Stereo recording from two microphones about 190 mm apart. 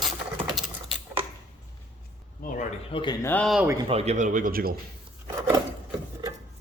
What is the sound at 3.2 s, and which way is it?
Speech, 10° left (ahead or behind).